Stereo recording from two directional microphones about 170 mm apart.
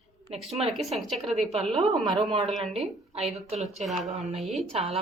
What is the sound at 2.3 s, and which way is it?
A woman's voice, 30° right (ahead or behind).